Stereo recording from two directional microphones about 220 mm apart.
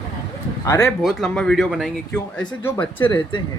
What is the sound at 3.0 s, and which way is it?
Speech, 20° left (ahead or behind).